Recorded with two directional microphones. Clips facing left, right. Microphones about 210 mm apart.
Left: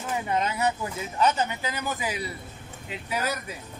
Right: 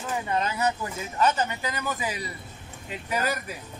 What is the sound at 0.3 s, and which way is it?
A man's voice, 15° left (ahead or behind).